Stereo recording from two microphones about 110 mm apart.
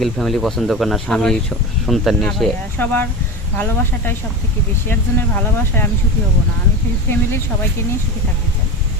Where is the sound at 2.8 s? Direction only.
15° left (ahead or behind).